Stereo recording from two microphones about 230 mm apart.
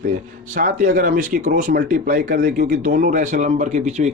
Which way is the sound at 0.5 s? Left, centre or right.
Right.